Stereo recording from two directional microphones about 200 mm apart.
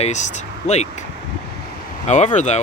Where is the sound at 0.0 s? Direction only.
35° left (ahead or behind).